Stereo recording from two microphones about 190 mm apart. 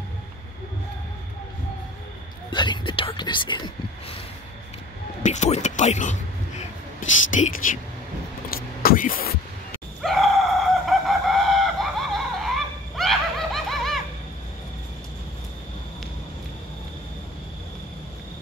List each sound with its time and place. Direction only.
2.5 s speech: 25° left (ahead or behind)
5.2 s speech: 40° left (ahead or behind)
8.5 s a sound: 50° left (ahead or behind)
10.0 s chicken: centre (ahead or behind)
12.4 s snicker: centre (ahead or behind)